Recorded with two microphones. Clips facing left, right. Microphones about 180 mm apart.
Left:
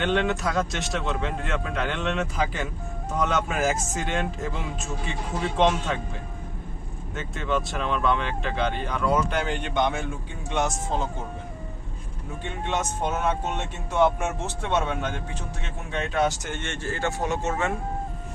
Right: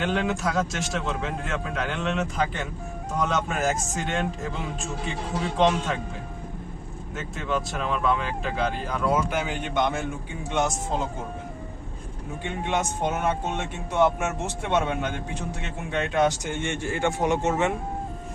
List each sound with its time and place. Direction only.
0.0 s speech: centre (ahead or behind)
7.2 s speech: centre (ahead or behind)
12.4 s speech: 15° right (ahead or behind)
16.1 s speech: 15° right (ahead or behind)